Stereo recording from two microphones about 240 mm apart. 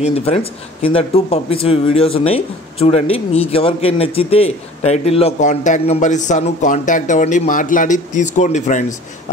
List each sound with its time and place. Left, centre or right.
0.0 s speech: left